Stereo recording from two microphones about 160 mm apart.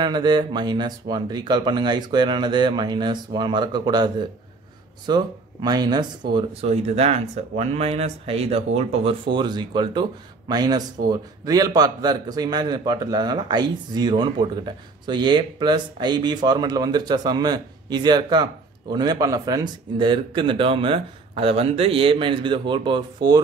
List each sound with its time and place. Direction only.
0.0 s a man's voice: 25° right (ahead or behind)
6.3 s a man's voice: 40° right (ahead or behind)